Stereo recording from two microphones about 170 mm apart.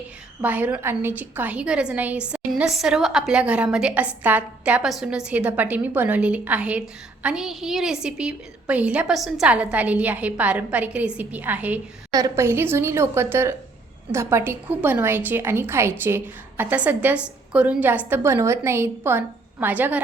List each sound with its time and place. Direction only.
0.4 s a woman's voice: 10° right (ahead or behind)